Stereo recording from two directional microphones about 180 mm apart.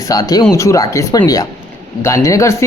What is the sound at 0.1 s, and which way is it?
Speech, 20° left (ahead or behind).